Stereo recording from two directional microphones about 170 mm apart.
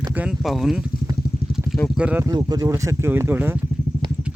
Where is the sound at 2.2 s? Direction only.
20° right (ahead or behind).